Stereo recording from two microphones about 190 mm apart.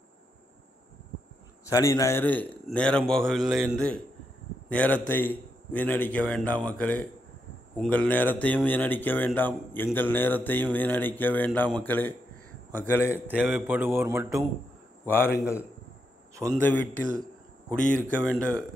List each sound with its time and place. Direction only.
1.7 s a man's voice: 15° left (ahead or behind)
13.3 s speech: 5° right (ahead or behind)
15.0 s a man's voice: 10° left (ahead or behind)
16.5 s a man's voice: 10° left (ahead or behind)